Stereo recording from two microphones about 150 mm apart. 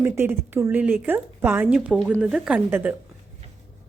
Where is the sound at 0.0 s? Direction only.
15° right (ahead or behind).